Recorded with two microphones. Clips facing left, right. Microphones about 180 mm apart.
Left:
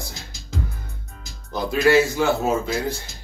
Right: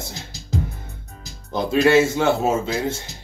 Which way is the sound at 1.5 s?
25° right (ahead or behind).